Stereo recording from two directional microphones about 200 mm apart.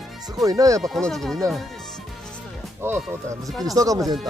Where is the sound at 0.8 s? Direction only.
Centre (ahead or behind).